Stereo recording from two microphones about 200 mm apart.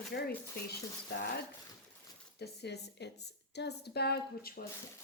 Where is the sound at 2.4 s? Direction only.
55° left (ahead or behind).